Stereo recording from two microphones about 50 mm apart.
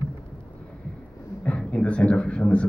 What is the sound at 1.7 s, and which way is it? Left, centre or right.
Speech, left.